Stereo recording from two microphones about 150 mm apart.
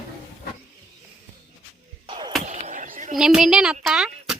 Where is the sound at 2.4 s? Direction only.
50° right (ahead or behind).